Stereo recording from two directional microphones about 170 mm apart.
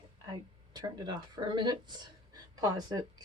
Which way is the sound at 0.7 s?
25° right (ahead or behind).